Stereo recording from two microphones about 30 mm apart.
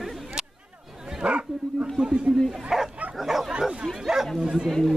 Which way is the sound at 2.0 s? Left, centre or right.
Right.